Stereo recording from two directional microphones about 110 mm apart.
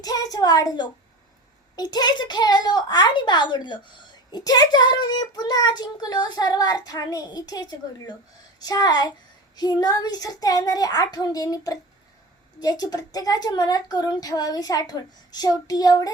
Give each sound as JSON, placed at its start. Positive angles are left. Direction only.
{"t": 0.0, "sound": "speech", "side_deg": 35}